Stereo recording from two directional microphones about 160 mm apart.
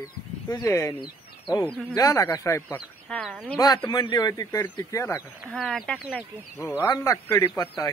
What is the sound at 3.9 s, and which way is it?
Speech, 30° left (ahead or behind).